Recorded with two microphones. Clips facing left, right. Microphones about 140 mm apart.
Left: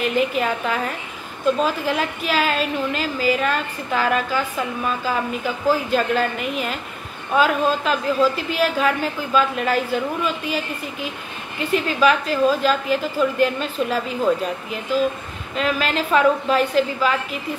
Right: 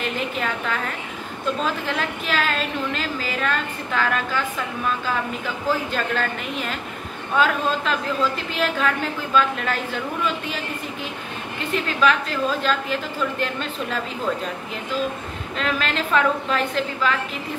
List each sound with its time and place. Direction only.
0.0 s a woman's voice: 10° left (ahead or behind)
5.7 s a woman's voice: 10° left (ahead or behind)
11.7 s a woman's voice: 10° left (ahead or behind)
15.5 s a woman's voice: 5° left (ahead or behind)